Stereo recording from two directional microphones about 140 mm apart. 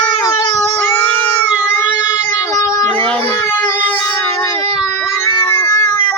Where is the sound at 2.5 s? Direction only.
25° left (ahead or behind).